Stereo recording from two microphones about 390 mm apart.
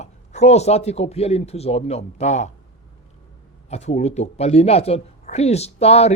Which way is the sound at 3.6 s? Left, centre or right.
Centre.